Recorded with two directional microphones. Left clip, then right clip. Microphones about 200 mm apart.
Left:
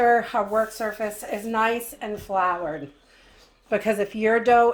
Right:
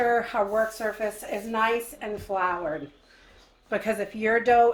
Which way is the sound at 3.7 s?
40° left (ahead or behind).